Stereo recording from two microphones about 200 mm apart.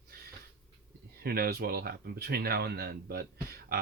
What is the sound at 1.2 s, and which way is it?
Speech, 50° right (ahead or behind).